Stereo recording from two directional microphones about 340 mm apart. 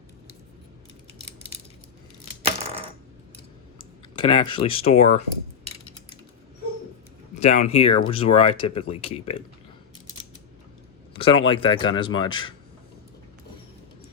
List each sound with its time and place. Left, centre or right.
3.8 s speech: centre
7.3 s speech: centre
11.2 s speech: centre